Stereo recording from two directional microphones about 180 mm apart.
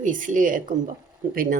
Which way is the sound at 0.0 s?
45° right (ahead or behind).